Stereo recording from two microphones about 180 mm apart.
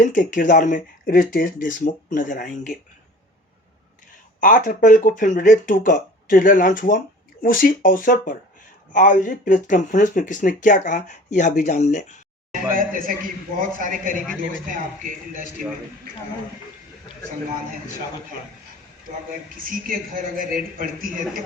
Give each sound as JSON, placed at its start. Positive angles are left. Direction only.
{"t": 0.0, "sound": "speech", "side_deg": 45}
{"t": 4.4, "sound": "speech", "side_deg": 50}
{"t": 12.7, "sound": "a man's voice", "side_deg": -50}
{"t": 19.6, "sound": "a man's voice", "side_deg": -50}